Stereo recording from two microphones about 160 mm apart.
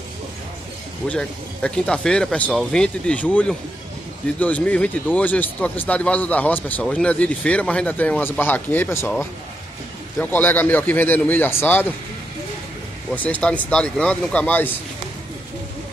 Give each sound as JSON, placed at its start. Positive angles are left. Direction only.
{"t": 1.0, "sound": "speech", "side_deg": 5}
{"t": 13.1, "sound": "speech", "side_deg": 10}